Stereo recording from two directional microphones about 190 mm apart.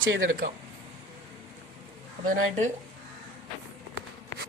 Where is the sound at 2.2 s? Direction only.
45° right (ahead or behind).